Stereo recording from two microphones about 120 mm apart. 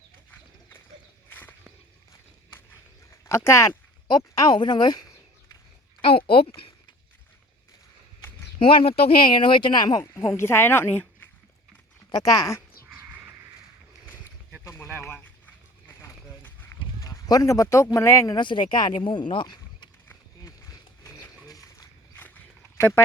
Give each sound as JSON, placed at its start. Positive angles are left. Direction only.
{"t": 1.3, "sound": "a sound", "side_deg": 15}
{"t": 3.2, "sound": "speech", "side_deg": 25}
{"t": 6.0, "sound": "speech", "side_deg": 50}
{"t": 8.5, "sound": "speech", "side_deg": 50}
{"t": 10.0, "sound": "speech", "side_deg": 25}
{"t": 12.1, "sound": "speech", "side_deg": 30}
{"t": 14.6, "sound": "a sound", "side_deg": 20}
{"t": 17.0, "sound": "speech", "side_deg": 30}
{"t": 18.3, "sound": "speech", "side_deg": 40}
{"t": 19.3, "sound": "a sound", "side_deg": 40}
{"t": 20.1, "sound": "horse", "side_deg": 25}
{"t": 22.1, "sound": "a sound", "side_deg": 15}